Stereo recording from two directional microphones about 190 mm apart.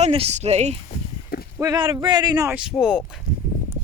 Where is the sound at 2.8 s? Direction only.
5° right (ahead or behind).